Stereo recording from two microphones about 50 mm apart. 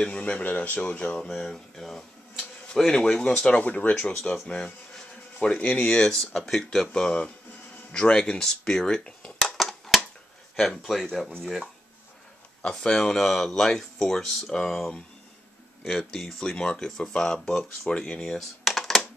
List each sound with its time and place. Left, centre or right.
0.0 s speech: left
0.4 s speech: left; by 3.4 s centre
3.4 s speech: left
4.0 s speech: centre
9.5 s a sound: centre
10.5 s speech: centre
12.6 s speech: centre
18.6 s a sound: centre